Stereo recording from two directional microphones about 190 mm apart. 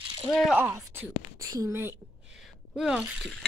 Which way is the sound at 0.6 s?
10° right (ahead or behind).